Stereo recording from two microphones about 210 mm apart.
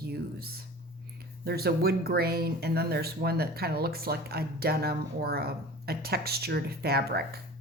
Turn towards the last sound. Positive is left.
turn(degrees=-50)  # may be behind; listen again after turning